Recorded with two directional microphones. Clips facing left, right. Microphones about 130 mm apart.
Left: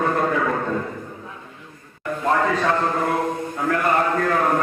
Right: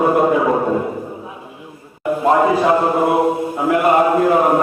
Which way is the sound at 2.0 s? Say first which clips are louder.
Right 7 dB; 20° right (ahead or behind).